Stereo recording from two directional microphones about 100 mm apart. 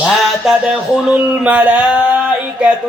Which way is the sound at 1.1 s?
10° right (ahead or behind).